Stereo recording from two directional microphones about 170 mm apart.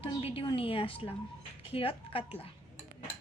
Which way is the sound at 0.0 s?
35° left (ahead or behind).